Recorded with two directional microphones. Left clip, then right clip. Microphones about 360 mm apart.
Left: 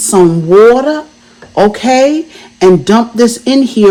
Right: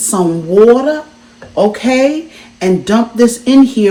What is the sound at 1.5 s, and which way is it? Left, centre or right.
Speech, left.